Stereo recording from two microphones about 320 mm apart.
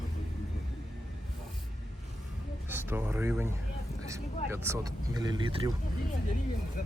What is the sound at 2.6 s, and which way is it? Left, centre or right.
Speech, centre.